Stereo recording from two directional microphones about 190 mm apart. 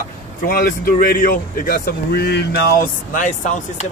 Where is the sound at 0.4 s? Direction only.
50° left (ahead or behind).